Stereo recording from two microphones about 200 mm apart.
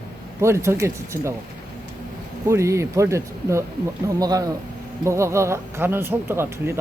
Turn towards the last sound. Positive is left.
turn(degrees=-10)  # may be behind; listen again after turning